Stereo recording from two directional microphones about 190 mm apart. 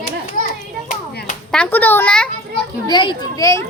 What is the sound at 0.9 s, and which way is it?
Clapping, 45° left (ahead or behind).